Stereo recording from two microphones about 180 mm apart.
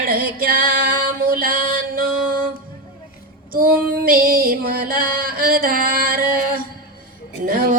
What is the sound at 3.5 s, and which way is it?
Female singing, 55° right (ahead or behind).